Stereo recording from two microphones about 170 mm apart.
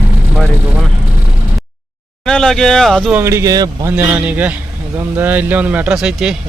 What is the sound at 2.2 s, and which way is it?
Speech, 5° left (ahead or behind).